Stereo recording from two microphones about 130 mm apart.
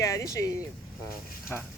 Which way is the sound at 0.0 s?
25° left (ahead or behind).